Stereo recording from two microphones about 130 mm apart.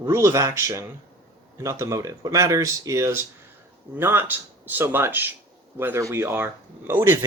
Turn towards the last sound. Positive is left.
turn(degrees=-20)  # may be behind; listen again after turning